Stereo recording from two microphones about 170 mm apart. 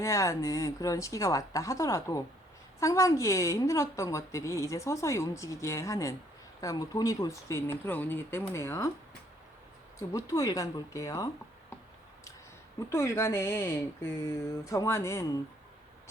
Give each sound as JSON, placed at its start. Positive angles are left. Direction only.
{"t": 0.0, "sound": "a woman's voice", "side_deg": 15}
{"t": 10.0, "sound": "a woman's voice", "side_deg": 20}
{"t": 12.9, "sound": "a woman's voice", "side_deg": 15}